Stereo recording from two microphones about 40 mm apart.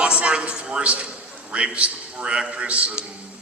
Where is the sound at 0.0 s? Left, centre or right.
Right.